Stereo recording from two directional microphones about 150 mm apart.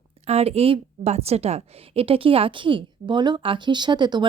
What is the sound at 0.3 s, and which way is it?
A woman's voice, 45° right (ahead or behind).